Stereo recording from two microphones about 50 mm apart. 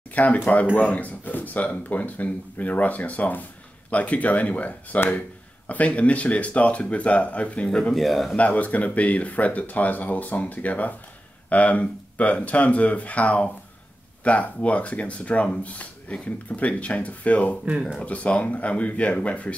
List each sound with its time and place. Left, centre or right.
0.1 s speech: left
7.9 s speech: centre
8.4 s speech: left
17.6 s speech: right
18.0 s speech: left